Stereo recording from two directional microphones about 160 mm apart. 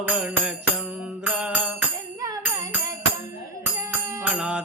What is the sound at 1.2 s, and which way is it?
Music, 10° right (ahead or behind).